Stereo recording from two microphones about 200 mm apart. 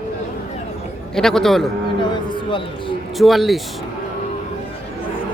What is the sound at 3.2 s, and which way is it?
Speech, centre (ahead or behind).